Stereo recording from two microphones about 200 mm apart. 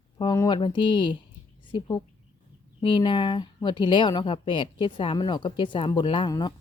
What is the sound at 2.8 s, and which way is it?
Speech, 25° left (ahead or behind).